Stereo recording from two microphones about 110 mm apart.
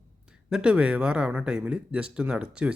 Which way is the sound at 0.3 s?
10° right (ahead or behind).